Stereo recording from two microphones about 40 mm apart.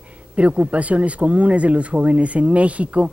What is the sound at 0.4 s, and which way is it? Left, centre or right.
Speech, right.